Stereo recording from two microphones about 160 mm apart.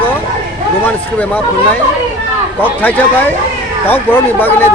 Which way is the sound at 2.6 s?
10° left (ahead or behind).